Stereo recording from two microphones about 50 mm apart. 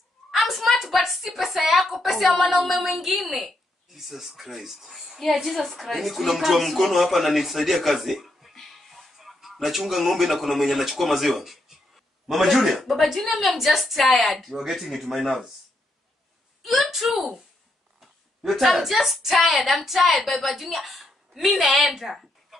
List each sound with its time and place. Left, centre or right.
0.5 s a sound: centre
0.7 s a woman's voice: centre
16.6 s a woman's voice: centre